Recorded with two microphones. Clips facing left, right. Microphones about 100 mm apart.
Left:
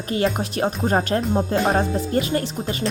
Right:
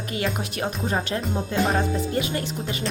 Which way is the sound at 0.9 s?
45° left (ahead or behind).